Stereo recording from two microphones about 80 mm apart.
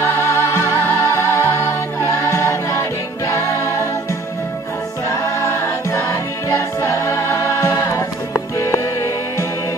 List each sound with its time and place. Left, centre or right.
0.0 s music: left
5.3 s choir: left
8.5 s music: left